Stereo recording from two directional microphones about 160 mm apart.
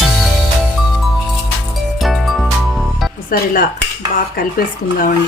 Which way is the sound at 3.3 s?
65° left (ahead or behind).